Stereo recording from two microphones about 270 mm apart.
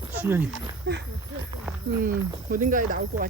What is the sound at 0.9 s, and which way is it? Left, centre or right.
Speech, right.